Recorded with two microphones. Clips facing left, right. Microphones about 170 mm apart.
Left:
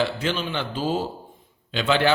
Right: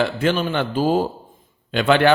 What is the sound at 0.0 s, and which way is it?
A man's voice, 50° right (ahead or behind).